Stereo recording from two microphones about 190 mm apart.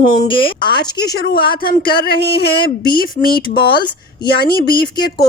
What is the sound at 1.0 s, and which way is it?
A woman's voice, 55° left (ahead or behind).